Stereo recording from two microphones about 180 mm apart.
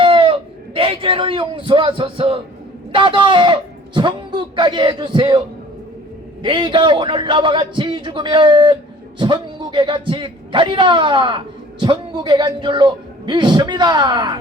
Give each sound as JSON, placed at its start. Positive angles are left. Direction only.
{"t": 0.0, "sound": "a sound", "side_deg": -30}
{"t": 2.9, "sound": "a man's voice", "side_deg": -30}
{"t": 6.4, "sound": "a man's voice", "side_deg": -25}